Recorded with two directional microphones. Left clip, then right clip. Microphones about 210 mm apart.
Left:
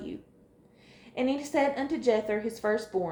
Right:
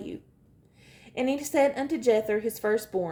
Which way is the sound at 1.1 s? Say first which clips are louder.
Right 3 dB; 50° right (ahead or behind).